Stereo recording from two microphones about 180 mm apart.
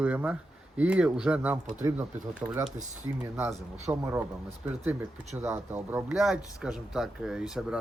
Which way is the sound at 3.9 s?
15° right (ahead or behind).